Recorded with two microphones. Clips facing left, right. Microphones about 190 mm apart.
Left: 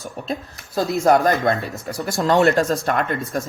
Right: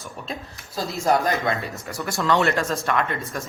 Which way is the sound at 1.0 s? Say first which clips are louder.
Left 4 dB; 50° left (ahead or behind).